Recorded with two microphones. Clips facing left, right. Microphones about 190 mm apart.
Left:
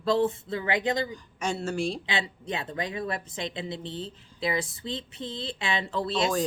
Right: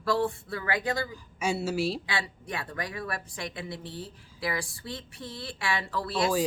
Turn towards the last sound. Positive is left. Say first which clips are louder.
# left 2 dB
turn(degrees=20)  # may be behind; listen again after turning